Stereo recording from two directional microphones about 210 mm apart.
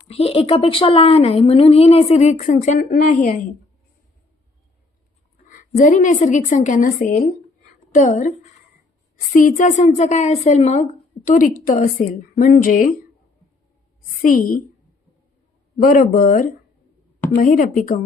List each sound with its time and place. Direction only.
0.1 s speech: 30° left (ahead or behind)
5.5 s a woman's voice: 40° left (ahead or behind)
9.3 s a woman's voice: 40° left (ahead or behind)
14.2 s a woman's voice: 40° left (ahead or behind)
15.8 s a woman's voice: 40° left (ahead or behind)